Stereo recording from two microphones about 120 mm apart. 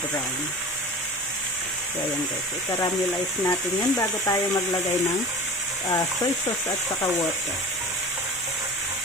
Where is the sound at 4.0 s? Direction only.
30° left (ahead or behind).